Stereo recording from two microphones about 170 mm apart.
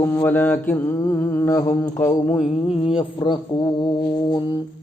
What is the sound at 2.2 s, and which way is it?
Mantra, centre (ahead or behind).